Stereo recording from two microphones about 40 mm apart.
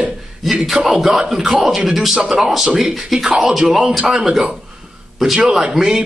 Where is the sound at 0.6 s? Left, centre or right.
Centre.